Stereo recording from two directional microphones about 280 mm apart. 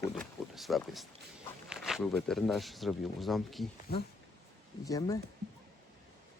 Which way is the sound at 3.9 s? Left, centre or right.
Left.